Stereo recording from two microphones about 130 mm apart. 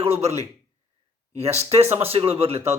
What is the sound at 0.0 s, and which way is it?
A man's voice, 55° right (ahead or behind).